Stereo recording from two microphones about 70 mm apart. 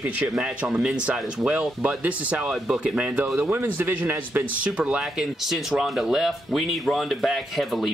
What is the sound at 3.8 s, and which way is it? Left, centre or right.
Speech, right.